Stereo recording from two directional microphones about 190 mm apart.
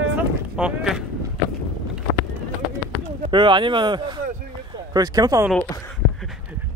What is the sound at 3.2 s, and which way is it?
Speech, 25° right (ahead or behind).